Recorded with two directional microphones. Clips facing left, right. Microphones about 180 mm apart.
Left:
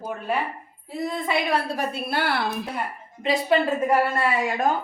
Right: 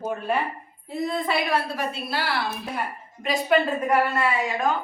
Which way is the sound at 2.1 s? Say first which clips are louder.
Left 3 dB; 55° left (ahead or behind).